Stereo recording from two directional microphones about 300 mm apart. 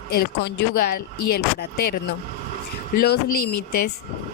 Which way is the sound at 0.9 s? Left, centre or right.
Left.